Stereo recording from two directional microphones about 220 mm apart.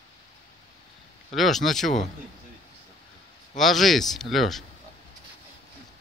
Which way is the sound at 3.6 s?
Centre (ahead or behind).